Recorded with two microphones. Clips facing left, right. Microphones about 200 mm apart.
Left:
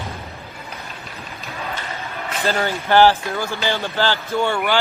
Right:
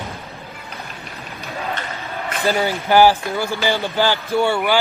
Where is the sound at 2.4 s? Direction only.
10° right (ahead or behind).